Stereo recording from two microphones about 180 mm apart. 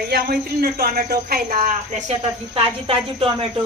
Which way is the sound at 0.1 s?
60° right (ahead or behind).